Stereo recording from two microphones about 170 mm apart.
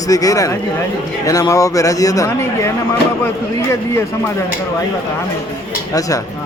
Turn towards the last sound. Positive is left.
turn(degrees=20)  # may be behind; listen again after turning